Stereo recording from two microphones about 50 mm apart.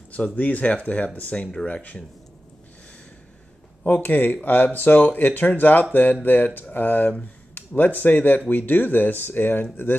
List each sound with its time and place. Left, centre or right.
0.1 s speech: left
3.8 s speech: left